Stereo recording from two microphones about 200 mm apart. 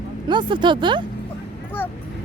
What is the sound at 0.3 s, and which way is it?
Speech, 25° right (ahead or behind).